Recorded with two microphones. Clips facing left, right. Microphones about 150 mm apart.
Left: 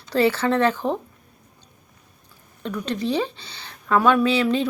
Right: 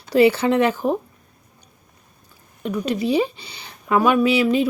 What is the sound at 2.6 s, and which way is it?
Speech, 10° right (ahead or behind).